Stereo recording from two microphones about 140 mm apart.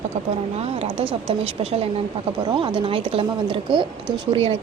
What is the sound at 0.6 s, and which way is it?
Speech, 50° right (ahead or behind).